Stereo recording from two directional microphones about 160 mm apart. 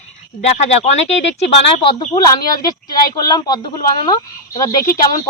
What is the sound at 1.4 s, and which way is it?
Speech, 35° left (ahead or behind).